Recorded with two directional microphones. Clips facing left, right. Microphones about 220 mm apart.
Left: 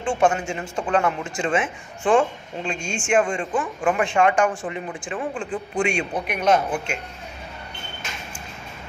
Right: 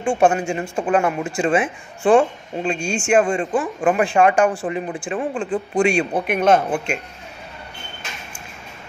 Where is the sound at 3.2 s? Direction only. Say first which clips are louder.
Right 3 dB; 35° right (ahead or behind).